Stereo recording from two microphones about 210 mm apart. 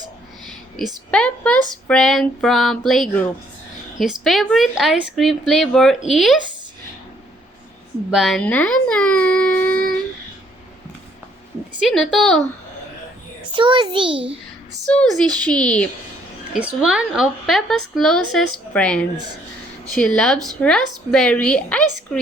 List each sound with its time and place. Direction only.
0.8 s speech: centre (ahead or behind)
8.1 s speech: centre (ahead or behind)
11.8 s speech: centre (ahead or behind)
13.5 s a child's voice: 25° right (ahead or behind)
14.8 s speech: 5° left (ahead or behind)